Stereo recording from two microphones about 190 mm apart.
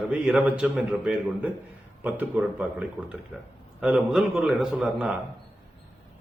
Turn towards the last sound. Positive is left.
turn(degrees=-5)  # may be behind; listen again after turning